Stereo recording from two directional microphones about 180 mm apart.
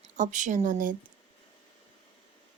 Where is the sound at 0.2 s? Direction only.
45° right (ahead or behind).